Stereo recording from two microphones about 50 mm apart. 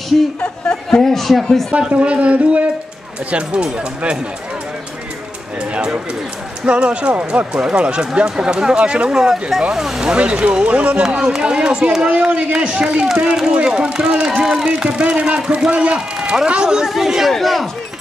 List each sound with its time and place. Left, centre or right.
0.8 s speech: centre
1.9 s speech: right
5.7 s a sound: centre
6.6 s speech: right
9.1 s speech: centre
10.1 s a man's voice: right
16.8 s speech: centre